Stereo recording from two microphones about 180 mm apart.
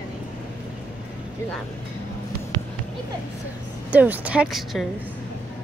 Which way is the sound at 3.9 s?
10° right (ahead or behind).